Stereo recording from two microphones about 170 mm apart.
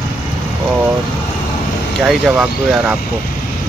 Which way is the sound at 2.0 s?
Centre (ahead or behind).